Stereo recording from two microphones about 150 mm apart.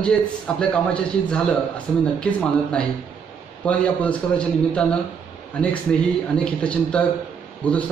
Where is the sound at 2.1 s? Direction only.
5° left (ahead or behind).